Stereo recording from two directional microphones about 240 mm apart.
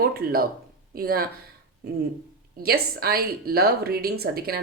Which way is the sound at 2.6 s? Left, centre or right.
Right.